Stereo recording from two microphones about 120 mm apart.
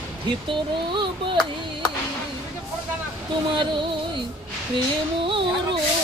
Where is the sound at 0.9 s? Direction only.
40° right (ahead or behind).